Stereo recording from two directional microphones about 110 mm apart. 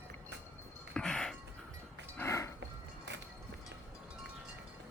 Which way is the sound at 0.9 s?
10° left (ahead or behind).